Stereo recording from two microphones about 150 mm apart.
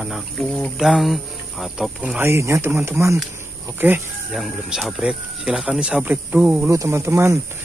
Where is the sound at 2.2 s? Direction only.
20° right (ahead or behind).